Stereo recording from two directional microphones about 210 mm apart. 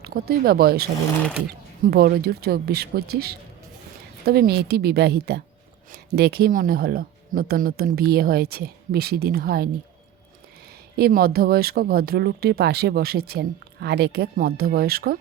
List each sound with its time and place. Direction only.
0.0 s speech: 45° right (ahead or behind)
1.9 s speech: 50° right (ahead or behind)
10.9 s speech: 45° right (ahead or behind)